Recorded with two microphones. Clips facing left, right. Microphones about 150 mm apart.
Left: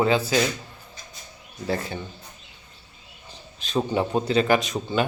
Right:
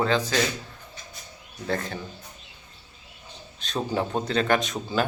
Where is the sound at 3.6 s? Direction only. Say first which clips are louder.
Left 3 dB; 5° left (ahead or behind).